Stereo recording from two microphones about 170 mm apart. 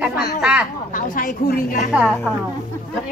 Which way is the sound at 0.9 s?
50° left (ahead or behind).